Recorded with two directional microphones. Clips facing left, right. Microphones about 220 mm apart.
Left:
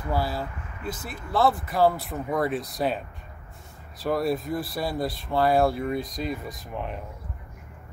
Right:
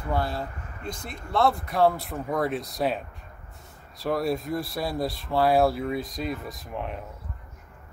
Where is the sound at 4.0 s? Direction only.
Centre (ahead or behind).